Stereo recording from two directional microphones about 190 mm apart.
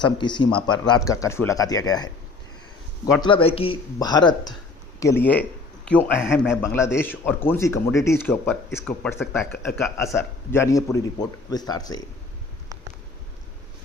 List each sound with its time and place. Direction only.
0.0 s speech: 25° left (ahead or behind)
3.2 s a man's voice: 25° left (ahead or behind)